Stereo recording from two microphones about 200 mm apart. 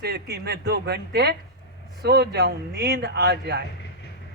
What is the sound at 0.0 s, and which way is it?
A man's voice, 55° right (ahead or behind).